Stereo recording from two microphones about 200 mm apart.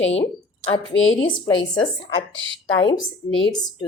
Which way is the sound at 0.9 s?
75° left (ahead or behind).